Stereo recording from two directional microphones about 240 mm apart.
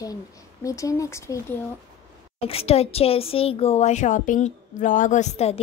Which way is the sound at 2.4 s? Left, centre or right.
Left.